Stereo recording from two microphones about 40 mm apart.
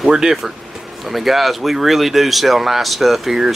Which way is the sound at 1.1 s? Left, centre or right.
Centre.